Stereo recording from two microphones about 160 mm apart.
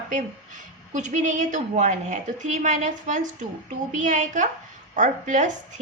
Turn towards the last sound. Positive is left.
turn(degrees=-50)  # may be behind; listen again after turning